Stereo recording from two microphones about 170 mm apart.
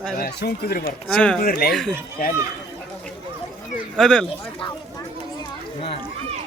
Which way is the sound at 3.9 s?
5° left (ahead or behind).